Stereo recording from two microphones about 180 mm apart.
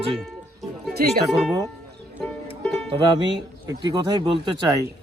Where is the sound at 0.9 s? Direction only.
60° right (ahead or behind).